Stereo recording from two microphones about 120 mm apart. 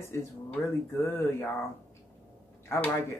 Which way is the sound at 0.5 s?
20° left (ahead or behind).